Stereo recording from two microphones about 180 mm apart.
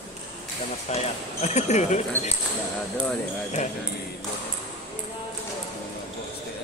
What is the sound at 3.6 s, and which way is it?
Speech, 40° left (ahead or behind).